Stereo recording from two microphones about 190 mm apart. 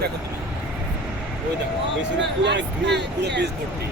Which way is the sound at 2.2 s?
70° right (ahead or behind).